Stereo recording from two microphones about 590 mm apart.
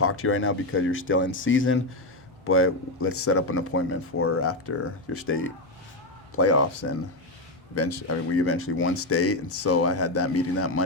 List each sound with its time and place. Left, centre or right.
0.0 s speech: left